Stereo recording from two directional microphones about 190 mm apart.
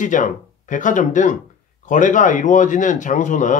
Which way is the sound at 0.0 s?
40° left (ahead or behind).